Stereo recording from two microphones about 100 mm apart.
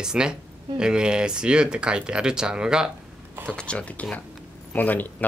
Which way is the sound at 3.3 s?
20° right (ahead or behind).